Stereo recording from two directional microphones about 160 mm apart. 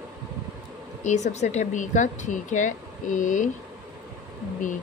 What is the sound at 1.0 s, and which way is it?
Speech, 50° left (ahead or behind).